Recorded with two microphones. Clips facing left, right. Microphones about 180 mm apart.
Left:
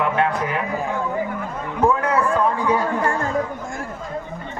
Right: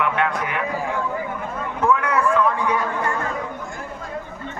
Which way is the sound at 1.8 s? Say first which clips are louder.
Left 1 dB; 30° left (ahead or behind).